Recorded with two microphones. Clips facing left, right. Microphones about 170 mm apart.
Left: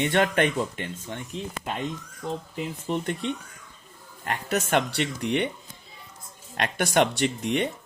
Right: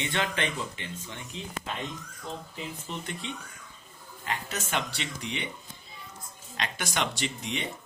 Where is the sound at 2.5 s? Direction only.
50° left (ahead or behind).